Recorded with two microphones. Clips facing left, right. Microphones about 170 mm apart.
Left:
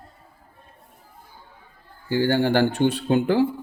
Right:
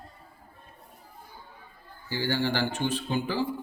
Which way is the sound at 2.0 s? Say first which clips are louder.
Left 8 dB; 50° left (ahead or behind).